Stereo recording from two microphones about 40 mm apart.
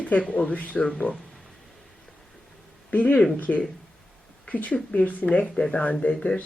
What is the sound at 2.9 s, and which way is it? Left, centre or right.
Speech, left.